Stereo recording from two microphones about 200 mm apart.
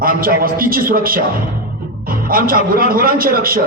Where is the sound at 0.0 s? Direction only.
45° right (ahead or behind).